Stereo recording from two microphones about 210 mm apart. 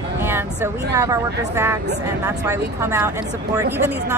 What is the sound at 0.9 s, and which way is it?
Speech, 15° right (ahead or behind).